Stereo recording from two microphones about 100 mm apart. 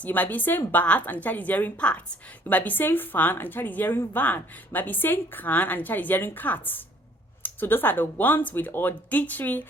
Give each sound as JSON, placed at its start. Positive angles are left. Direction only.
{"t": 0.0, "sound": "a woman's voice", "side_deg": 15}